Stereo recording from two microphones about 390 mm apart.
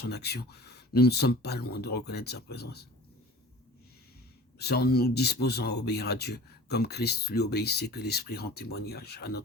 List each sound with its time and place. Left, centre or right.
0.0 s speech: left
4.5 s speech: left